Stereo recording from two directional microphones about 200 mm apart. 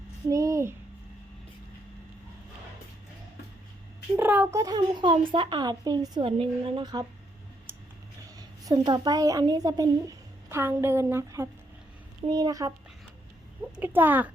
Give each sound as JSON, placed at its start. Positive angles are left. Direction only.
{"t": 0.3, "sound": "a sound", "side_deg": -15}
{"t": 4.2, "sound": "a woman's voice", "side_deg": -10}
{"t": 8.4, "sound": "a woman's voice", "side_deg": -20}
{"t": 13.7, "sound": "speech", "side_deg": -10}